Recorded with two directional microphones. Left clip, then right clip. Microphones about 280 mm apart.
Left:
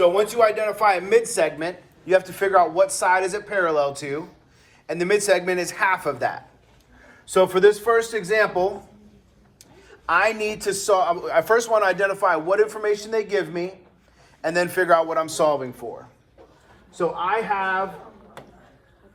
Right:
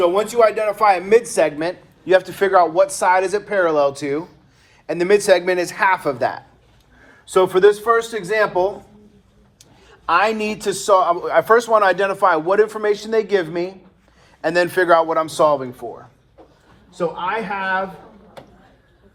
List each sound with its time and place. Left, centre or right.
0.0 s speech: right
8.1 s speech: centre
10.1 s speech: centre